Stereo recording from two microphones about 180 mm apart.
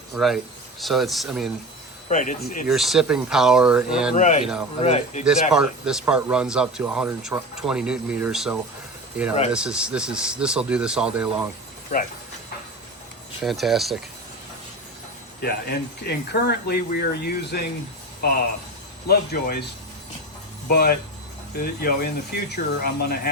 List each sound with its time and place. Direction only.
0.1 s speech: centre (ahead or behind)
2.0 s speech: 45° left (ahead or behind)
2.6 s speech: centre (ahead or behind)
4.1 s speech: 40° left (ahead or behind)
5.2 s speech: 5° right (ahead or behind)
13.4 s speech: centre (ahead or behind)
15.4 s speech: 60° left (ahead or behind)
19.0 s speech: 60° left (ahead or behind)